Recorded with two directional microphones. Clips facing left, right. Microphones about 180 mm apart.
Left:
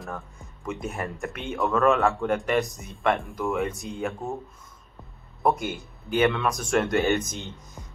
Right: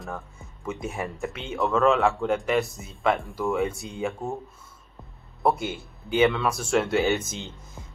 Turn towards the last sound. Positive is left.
turn(degrees=15)  # may be behind; listen again after turning